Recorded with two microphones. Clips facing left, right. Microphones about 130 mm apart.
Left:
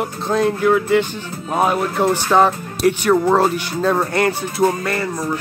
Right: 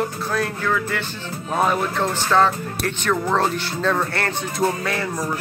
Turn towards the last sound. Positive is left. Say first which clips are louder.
# left 3 dB
turn(degrees=0)  # may be behind; listen again after turning